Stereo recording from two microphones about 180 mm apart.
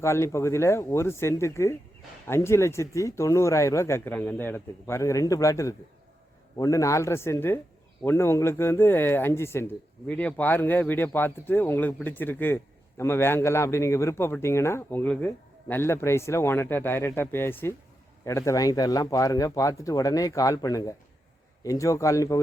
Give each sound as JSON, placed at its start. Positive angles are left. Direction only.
{"t": 0.0, "sound": "a man's voice", "side_deg": 15}